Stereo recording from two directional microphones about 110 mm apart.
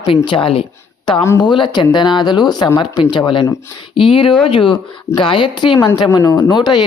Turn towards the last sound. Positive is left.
turn(degrees=45)  # may be behind; listen again after turning